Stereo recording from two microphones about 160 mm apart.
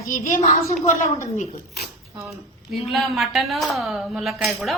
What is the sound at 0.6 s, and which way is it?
Speech, 20° left (ahead or behind).